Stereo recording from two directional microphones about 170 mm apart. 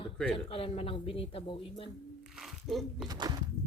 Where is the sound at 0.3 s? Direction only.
35° left (ahead or behind).